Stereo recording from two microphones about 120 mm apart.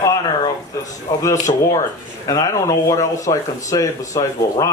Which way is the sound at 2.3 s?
30° left (ahead or behind).